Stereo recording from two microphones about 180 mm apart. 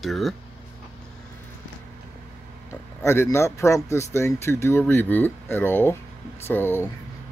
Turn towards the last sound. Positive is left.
turn(degrees=10)  # may be behind; listen again after turning